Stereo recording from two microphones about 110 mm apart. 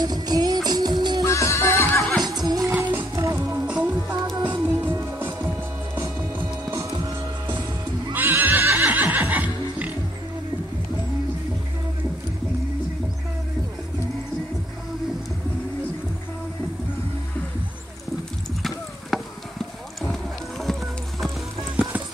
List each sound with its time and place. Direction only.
0.0 s music: 40° right (ahead or behind)
1.2 s music: 25° left (ahead or behind)
2.1 s neigh: 40° right (ahead or behind)
2.8 s music: 20° right (ahead or behind)
3.6 s music: 15° right (ahead or behind); by 6.9 s 30° right (ahead or behind)
8.1 s neigh: 15° right (ahead or behind)
18.6 s clip-clop: centre (ahead or behind)